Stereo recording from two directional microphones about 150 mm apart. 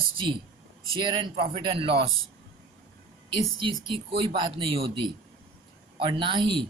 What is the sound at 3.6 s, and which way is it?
A man's voice, 35° right (ahead or behind).